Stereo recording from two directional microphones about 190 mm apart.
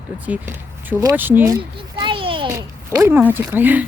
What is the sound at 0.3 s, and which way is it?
Speech, 10° right (ahead or behind).